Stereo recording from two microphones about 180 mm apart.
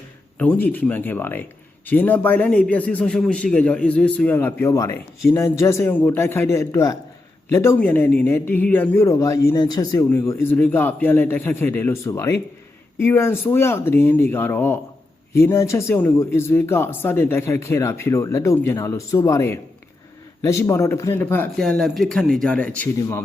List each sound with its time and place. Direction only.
0.3 s a man's voice: 10° left (ahead or behind)